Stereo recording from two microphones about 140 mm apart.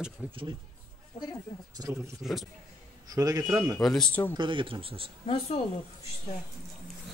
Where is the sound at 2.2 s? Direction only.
Centre (ahead or behind).